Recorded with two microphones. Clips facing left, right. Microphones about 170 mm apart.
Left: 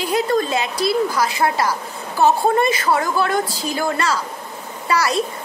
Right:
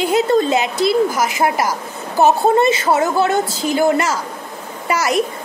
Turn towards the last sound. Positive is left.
turn(degrees=-20)  # may be behind; listen again after turning